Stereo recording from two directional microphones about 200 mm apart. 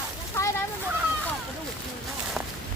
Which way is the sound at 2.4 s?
Centre (ahead or behind).